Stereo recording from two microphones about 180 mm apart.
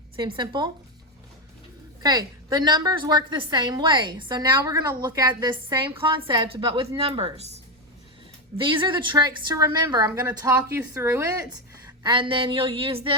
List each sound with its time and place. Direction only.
0.2 s a woman's voice: 25° right (ahead or behind)
2.0 s a woman's voice: 20° right (ahead or behind)
12.0 s a woman's voice: 25° right (ahead or behind)